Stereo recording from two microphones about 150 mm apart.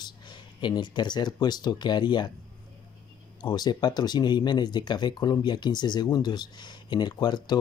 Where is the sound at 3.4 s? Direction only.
30° left (ahead or behind).